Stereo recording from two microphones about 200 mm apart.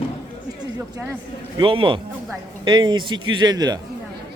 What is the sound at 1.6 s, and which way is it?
A man's voice, 25° right (ahead or behind).